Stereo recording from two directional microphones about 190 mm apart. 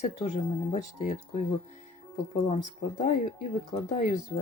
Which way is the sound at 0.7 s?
40° left (ahead or behind).